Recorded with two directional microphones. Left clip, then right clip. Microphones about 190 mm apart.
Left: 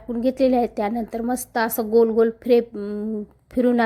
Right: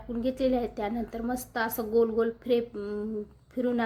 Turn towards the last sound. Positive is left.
turn(degrees=40)  # may be behind; listen again after turning